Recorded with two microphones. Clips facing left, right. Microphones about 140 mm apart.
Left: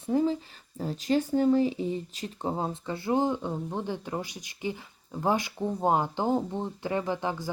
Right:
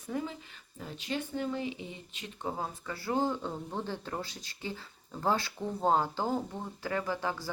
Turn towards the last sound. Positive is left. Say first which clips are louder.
# left 4 dB
turn(degrees=20)  # may be behind; listen again after turning